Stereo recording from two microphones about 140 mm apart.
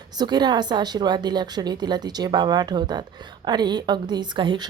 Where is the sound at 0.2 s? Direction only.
30° right (ahead or behind).